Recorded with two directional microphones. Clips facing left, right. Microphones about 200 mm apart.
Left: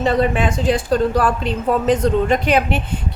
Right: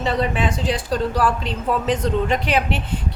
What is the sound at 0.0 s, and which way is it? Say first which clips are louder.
Speech: left 4 dB; 50° left (ahead or behind).